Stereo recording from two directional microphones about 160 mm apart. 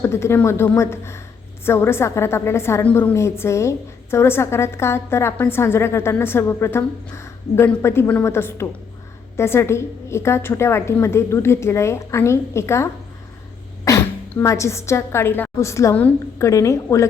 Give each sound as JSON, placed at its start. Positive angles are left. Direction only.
{"t": 0.0, "sound": "a woman's voice", "side_deg": 15}